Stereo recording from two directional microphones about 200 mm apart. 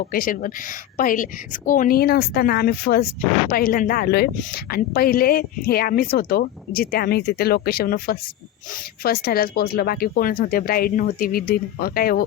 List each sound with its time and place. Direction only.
0.1 s speech: 45° left (ahead or behind)